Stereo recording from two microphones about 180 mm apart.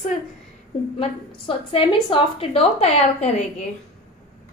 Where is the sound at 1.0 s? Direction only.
30° left (ahead or behind).